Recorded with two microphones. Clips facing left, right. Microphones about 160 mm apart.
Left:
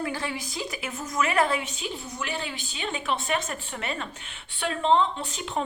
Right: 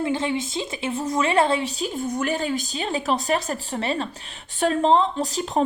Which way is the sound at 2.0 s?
50° right (ahead or behind).